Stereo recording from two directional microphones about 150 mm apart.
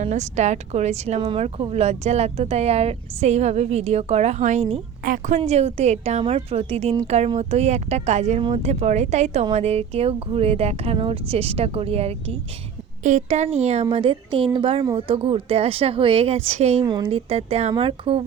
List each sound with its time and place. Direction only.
0.0 s speech: 50° right (ahead or behind)
5.0 s speech: 60° right (ahead or behind)
5.5 s a woman's voice: 45° right (ahead or behind)
13.0 s a woman's voice: 55° right (ahead or behind)
16.8 s a woman's voice: 35° right (ahead or behind)